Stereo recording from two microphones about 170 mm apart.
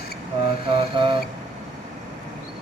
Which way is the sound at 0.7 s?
30° right (ahead or behind).